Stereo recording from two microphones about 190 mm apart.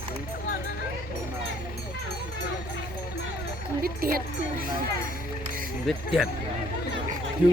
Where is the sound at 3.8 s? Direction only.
50° right (ahead or behind).